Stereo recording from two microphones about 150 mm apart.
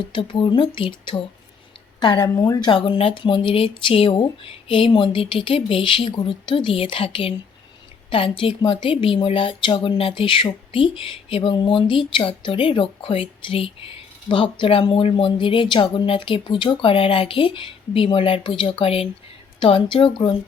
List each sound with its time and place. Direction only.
0.0 s speech: 30° left (ahead or behind)